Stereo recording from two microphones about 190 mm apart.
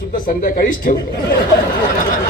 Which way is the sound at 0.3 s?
45° left (ahead or behind).